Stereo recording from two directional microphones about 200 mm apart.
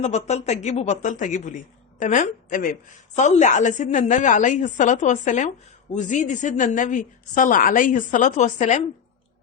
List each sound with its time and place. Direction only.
0.0 s a woman's voice: 35° left (ahead or behind)